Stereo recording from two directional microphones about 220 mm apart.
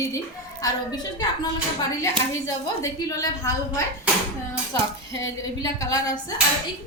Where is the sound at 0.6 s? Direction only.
15° left (ahead or behind).